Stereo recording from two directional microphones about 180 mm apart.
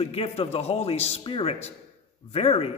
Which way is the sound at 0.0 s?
35° left (ahead or behind).